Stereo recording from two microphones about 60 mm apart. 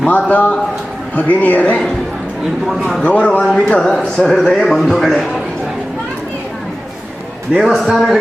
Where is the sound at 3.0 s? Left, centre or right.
Left; by 5.1 s centre.